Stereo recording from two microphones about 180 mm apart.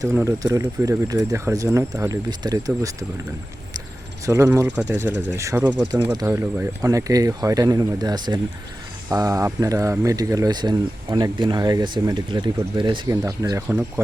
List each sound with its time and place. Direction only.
0.0 s speech: 15° right (ahead or behind)
4.3 s speech: 15° right (ahead or behind)